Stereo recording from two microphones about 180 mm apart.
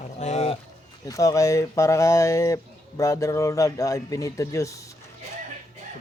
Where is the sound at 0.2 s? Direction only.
35° left (ahead or behind).